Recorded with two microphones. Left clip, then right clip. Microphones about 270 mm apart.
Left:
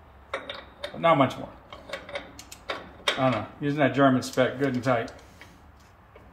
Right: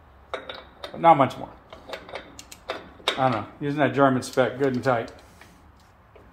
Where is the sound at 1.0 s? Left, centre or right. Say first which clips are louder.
Right 4 dB; centre.